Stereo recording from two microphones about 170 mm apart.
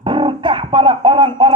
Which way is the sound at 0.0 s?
30° right (ahead or behind).